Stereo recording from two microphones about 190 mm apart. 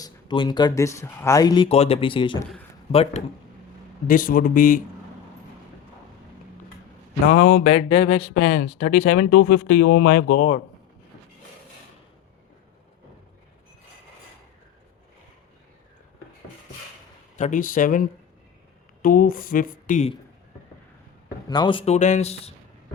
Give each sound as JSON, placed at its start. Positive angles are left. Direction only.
{"t": 0.0, "sound": "speech", "side_deg": 25}
{"t": 4.0, "sound": "speech", "side_deg": 45}
{"t": 7.3, "sound": "speech", "side_deg": 45}
{"t": 8.3, "sound": "speech", "side_deg": 45}
{"t": 17.3, "sound": "speech", "side_deg": 40}
{"t": 21.5, "sound": "speech", "side_deg": 25}